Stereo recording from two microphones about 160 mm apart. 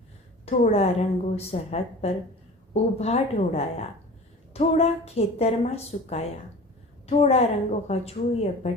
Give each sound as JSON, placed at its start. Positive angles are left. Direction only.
{"t": 0.4, "sound": "a woman's voice", "side_deg": 45}